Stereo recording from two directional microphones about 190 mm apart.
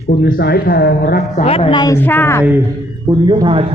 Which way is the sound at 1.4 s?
30° left (ahead or behind).